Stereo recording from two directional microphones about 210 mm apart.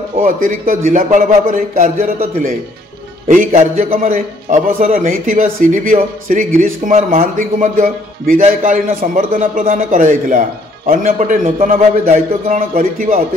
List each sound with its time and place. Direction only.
0.2 s a man's voice: 40° right (ahead or behind)